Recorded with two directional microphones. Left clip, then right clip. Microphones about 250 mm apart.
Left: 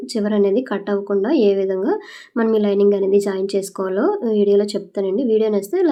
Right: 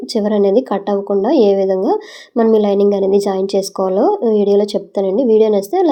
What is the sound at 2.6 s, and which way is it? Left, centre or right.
Speech, centre.